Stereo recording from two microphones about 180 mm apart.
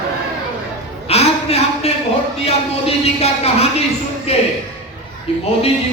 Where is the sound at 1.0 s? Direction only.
35° left (ahead or behind).